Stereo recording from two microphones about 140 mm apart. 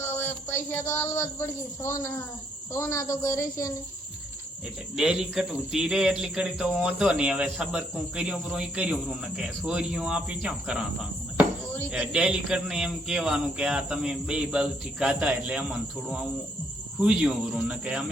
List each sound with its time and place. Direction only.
0.0 s speech: 15° left (ahead or behind)
4.9 s speech: 5° right (ahead or behind)
11.9 s speech: 5° right (ahead or behind)
17.0 s speech: 5° right (ahead or behind)